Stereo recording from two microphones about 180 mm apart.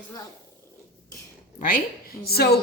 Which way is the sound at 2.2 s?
60° left (ahead or behind).